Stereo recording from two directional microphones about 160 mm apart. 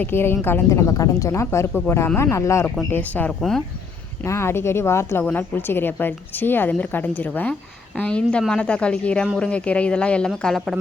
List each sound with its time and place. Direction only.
0.0 s a woman's voice: 15° left (ahead or behind)
2.6 s a woman's voice: 5° left (ahead or behind)
4.2 s a woman's voice: 15° left (ahead or behind)